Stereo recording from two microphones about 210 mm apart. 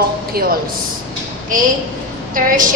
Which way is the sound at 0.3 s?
45° right (ahead or behind).